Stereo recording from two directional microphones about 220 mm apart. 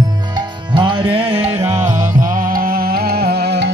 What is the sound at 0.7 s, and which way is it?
Music, 20° right (ahead or behind).